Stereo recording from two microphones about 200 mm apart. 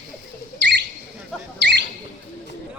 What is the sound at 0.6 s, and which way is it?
Bird, 60° right (ahead or behind).